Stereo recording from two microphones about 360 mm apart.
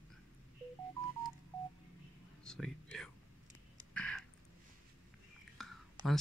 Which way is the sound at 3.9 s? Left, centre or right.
Centre.